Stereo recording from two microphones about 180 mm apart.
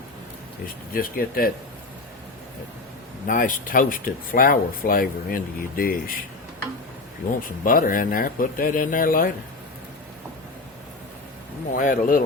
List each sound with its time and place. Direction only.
0.9 s speech: 55° left (ahead or behind)
3.2 s speech: 50° left (ahead or behind)
7.6 s speech: 50° left (ahead or behind)
11.7 s speech: 50° left (ahead or behind)